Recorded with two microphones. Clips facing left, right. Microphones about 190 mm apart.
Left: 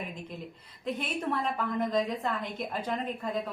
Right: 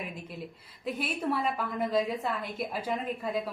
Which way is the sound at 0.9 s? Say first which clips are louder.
Right 1 dB; 5° right (ahead or behind).